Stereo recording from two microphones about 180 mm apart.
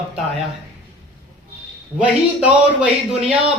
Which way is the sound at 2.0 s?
5° right (ahead or behind).